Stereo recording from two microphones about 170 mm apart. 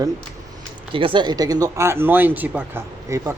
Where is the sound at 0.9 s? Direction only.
30° right (ahead or behind).